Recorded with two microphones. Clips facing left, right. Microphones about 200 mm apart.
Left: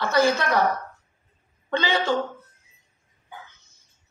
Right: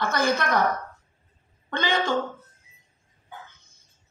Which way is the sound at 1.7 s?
55° right (ahead or behind).